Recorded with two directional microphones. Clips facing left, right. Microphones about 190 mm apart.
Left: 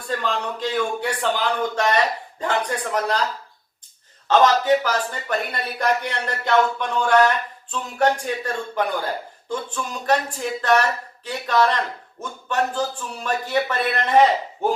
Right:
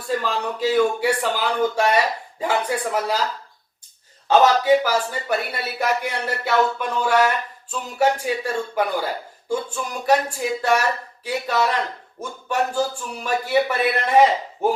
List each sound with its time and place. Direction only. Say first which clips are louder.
0.1 s speech: right 2 dB; 5° right (ahead or behind)
4.3 s speech: right 1 dB; 10° right (ahead or behind)